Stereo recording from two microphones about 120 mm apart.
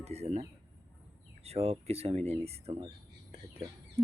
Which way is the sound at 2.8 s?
50° right (ahead or behind).